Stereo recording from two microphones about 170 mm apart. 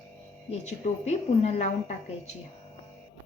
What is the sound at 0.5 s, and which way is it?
A woman's voice, 40° left (ahead or behind).